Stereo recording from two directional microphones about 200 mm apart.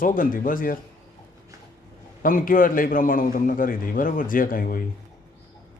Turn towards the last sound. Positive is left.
turn(degrees=45)  # may be behind; listen again after turning